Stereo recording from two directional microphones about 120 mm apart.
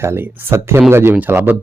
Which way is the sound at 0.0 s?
20° right (ahead or behind).